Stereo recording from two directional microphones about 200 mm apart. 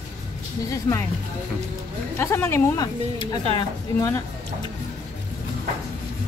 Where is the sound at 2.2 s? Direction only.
10° left (ahead or behind).